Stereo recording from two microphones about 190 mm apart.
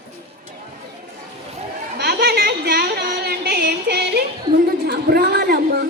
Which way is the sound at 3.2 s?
55° right (ahead or behind).